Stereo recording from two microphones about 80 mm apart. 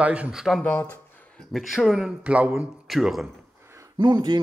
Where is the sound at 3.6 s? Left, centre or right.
Right.